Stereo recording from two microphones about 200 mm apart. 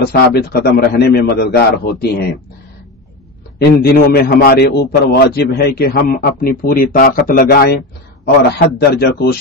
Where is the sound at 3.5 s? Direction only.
50° left (ahead or behind).